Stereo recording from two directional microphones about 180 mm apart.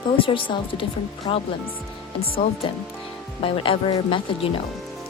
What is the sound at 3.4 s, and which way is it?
Speech, 30° left (ahead or behind).